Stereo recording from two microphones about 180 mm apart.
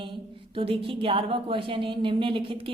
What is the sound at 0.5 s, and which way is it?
A woman's voice, 30° right (ahead or behind).